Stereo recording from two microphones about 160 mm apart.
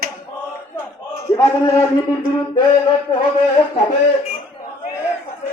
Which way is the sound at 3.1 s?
25° left (ahead or behind).